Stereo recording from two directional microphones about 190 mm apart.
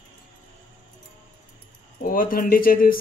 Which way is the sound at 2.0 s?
50° left (ahead or behind).